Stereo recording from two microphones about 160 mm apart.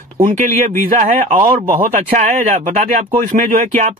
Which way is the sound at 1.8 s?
55° right (ahead or behind).